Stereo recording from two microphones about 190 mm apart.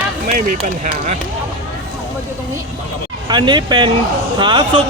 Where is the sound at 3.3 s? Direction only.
25° right (ahead or behind).